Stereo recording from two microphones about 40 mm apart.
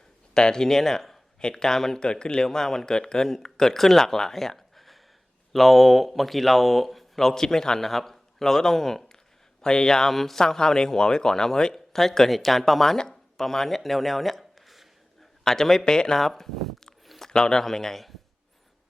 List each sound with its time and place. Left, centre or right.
0.3 s a man's voice: centre
10.4 s speech: centre
15.4 s speech: centre
16.1 s a sound: centre
17.3 s speech: centre